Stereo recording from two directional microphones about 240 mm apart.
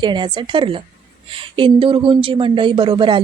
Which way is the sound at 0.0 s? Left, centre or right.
Centre.